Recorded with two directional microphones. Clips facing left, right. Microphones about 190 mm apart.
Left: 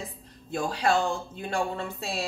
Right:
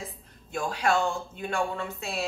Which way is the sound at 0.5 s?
35° left (ahead or behind).